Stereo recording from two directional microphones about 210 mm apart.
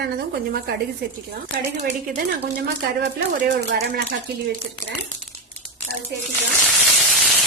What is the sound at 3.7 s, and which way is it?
Speech, 50° right (ahead or behind).